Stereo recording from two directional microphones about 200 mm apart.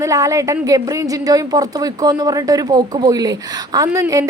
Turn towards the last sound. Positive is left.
turn(degrees=-15)  # may be behind; listen again after turning